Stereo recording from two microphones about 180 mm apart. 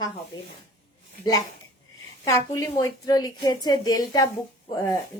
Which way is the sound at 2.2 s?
15° left (ahead or behind).